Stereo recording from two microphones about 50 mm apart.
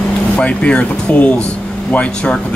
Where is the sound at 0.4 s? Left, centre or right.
Left.